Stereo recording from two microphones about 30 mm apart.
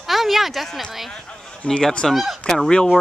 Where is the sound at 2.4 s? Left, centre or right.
Left.